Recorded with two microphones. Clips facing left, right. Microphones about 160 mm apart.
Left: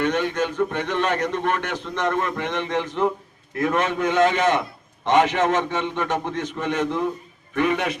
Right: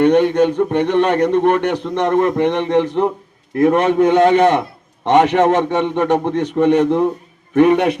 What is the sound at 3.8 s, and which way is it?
A man's voice, 60° right (ahead or behind).